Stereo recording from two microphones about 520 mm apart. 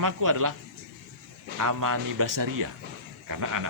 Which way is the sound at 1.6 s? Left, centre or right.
Right.